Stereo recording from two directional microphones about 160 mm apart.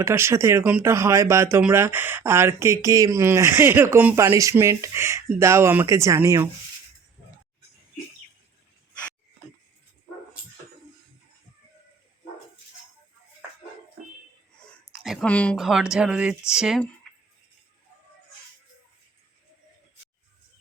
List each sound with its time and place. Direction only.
0.0 s speech: 15° right (ahead or behind)
14.9 s speech: centre (ahead or behind)